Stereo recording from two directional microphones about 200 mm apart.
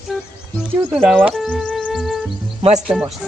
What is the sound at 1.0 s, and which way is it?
A man's voice, centre (ahead or behind).